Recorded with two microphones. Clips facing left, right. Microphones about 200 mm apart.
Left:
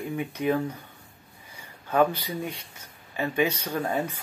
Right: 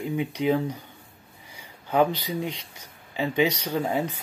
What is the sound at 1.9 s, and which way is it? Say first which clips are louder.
Speech: right 1 dB; 15° right (ahead or behind).